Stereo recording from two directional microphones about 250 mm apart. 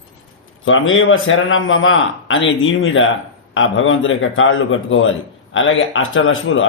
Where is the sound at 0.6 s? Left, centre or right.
Left.